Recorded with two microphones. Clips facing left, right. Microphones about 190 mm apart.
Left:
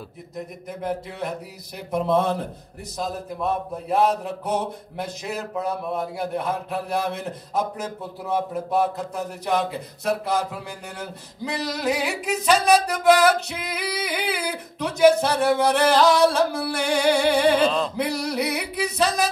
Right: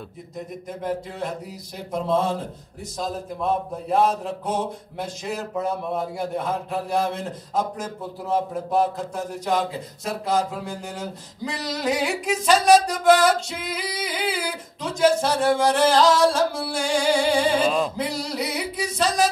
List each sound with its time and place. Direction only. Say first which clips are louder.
2.0 s female singing: left 2 dB; 60° left (ahead or behind)
3.0 s a man's voice: even; centre (ahead or behind)
5.2 s a man's voice: right 2 dB; centre (ahead or behind)
7.1 s female singing: even; 60° left (ahead or behind)
8.7 s a man's voice: right 1 dB; centre (ahead or behind)
9.6 s female singing: even; 60° left (ahead or behind)
11.8 s a man's voice: right 2 dB; centre (ahead or behind)
12.9 s female singing: even; 65° left (ahead or behind)
17.6 s male singing: right 1 dB; 10° right (ahead or behind)
17.9 s female singing: left 2 dB; 60° left (ahead or behind)